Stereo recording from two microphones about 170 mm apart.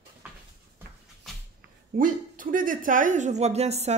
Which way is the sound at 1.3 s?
Centre (ahead or behind).